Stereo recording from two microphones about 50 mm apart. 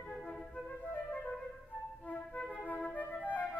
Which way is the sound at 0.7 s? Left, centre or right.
Left.